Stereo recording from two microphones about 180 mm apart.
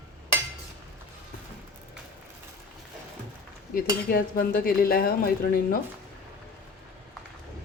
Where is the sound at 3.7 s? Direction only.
55° left (ahead or behind).